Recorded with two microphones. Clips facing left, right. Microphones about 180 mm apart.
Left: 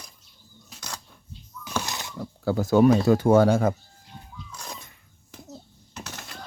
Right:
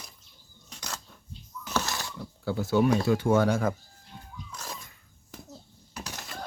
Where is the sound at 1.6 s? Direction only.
15° left (ahead or behind).